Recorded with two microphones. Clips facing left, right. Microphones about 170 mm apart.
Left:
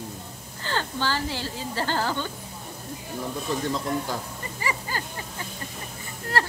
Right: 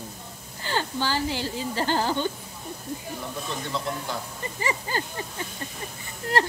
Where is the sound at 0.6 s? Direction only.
15° right (ahead or behind).